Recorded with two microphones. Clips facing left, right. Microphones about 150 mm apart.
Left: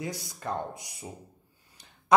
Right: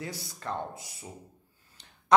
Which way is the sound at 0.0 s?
15° left (ahead or behind).